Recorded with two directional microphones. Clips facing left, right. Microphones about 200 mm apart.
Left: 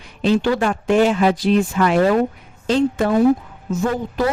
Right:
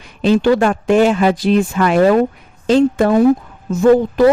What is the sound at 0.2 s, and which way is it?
A man's voice, 75° right (ahead or behind).